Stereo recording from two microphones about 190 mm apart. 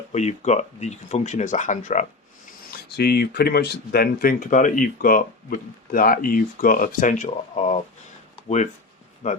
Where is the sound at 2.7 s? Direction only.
55° left (ahead or behind).